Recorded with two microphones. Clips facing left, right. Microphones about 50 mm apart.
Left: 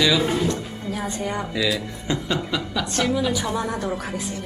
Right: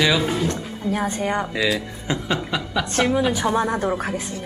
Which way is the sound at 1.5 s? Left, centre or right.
Right.